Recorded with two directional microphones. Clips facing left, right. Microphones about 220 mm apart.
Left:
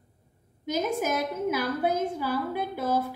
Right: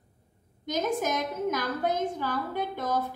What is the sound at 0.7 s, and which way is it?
A woman's voice, 10° left (ahead or behind).